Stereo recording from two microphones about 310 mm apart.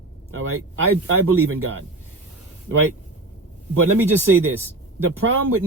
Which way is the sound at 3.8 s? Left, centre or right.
Right.